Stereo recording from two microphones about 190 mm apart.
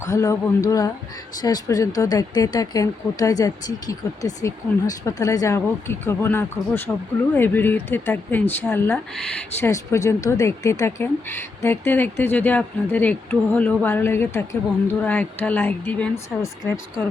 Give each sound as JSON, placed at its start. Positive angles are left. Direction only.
{"t": 0.0, "sound": "speech", "side_deg": 15}